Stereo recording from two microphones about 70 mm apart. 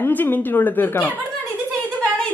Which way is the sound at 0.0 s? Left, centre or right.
Left.